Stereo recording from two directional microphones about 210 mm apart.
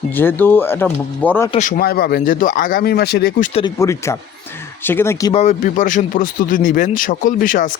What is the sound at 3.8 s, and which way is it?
Speech, 15° left (ahead or behind).